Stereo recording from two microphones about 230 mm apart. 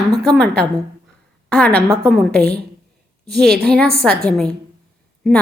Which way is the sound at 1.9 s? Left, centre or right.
Centre.